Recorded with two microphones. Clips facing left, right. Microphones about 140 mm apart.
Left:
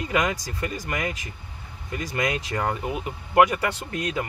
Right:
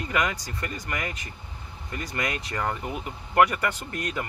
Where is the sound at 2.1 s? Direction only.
20° left (ahead or behind).